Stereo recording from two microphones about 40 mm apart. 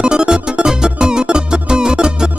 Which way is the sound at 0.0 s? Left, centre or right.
Right.